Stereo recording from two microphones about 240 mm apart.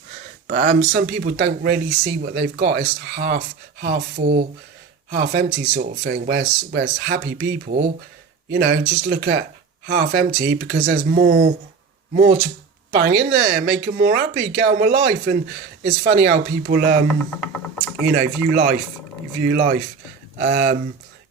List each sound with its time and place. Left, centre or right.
0.4 s speech: right
18.1 s speech: right